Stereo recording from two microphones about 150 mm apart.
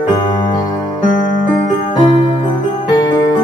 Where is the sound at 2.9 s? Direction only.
30° left (ahead or behind).